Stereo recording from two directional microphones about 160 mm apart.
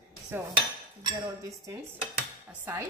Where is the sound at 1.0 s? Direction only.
20° right (ahead or behind).